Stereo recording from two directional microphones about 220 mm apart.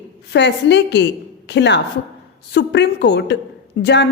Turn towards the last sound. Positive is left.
turn(degrees=50)  # may be behind; listen again after turning